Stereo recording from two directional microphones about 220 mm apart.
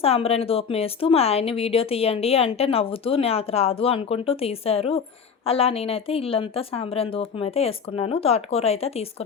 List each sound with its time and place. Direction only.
0.0 s speech: 25° left (ahead or behind)